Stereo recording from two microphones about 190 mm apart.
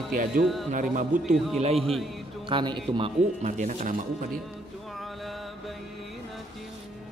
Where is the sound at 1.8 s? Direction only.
Centre (ahead or behind).